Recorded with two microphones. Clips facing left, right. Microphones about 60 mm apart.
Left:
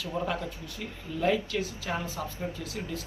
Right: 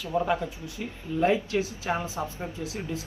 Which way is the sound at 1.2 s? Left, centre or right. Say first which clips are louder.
Right 3 dB; right.